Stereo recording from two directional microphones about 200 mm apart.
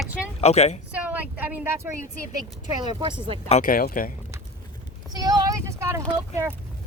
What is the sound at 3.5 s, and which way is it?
Speech, 40° left (ahead or behind).